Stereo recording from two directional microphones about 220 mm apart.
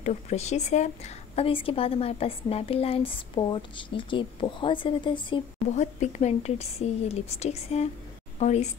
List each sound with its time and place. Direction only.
0.0 s a woman's voice: 30° left (ahead or behind)